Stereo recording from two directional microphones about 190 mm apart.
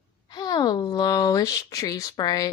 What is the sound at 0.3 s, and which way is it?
Speech, 20° left (ahead or behind).